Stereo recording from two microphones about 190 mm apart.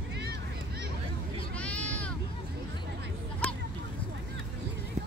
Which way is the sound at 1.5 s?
5° left (ahead or behind).